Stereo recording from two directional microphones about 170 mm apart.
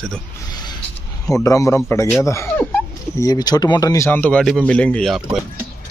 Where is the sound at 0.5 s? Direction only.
25° left (ahead or behind).